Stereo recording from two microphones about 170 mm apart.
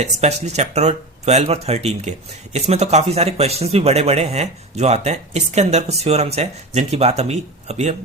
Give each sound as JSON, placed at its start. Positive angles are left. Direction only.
{"t": 0.0, "sound": "speech", "side_deg": -40}